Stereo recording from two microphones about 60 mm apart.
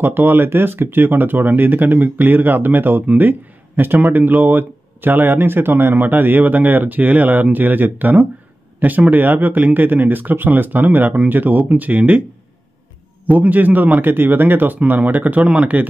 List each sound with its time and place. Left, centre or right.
0.0 s speech: right
13.3 s speech: right